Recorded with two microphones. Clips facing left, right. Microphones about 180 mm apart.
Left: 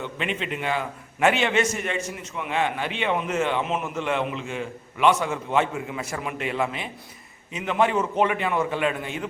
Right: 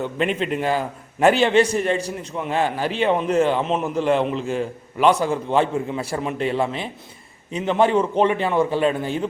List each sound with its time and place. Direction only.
0.0 s a man's voice: 40° right (ahead or behind)